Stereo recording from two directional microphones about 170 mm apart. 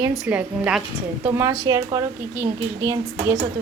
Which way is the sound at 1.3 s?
20° right (ahead or behind).